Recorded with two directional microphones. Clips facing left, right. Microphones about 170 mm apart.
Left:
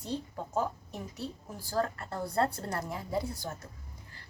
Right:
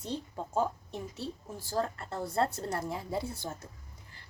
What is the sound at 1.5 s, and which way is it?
A woman's voice, 25° right (ahead or behind).